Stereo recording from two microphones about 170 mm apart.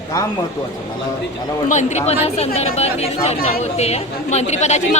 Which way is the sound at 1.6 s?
45° left (ahead or behind).